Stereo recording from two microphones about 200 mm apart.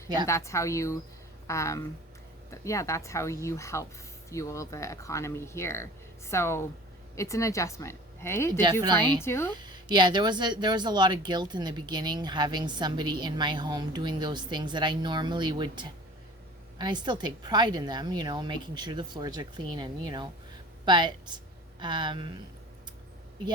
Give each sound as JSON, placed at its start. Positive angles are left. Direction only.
{"t": 0.3, "sound": "speech", "side_deg": 15}
{"t": 8.8, "sound": "speech", "side_deg": -20}
{"t": 9.2, "sound": "speech", "side_deg": 10}
{"t": 9.5, "sound": "speech", "side_deg": -20}